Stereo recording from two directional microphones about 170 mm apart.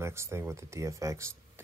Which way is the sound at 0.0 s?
15° right (ahead or behind).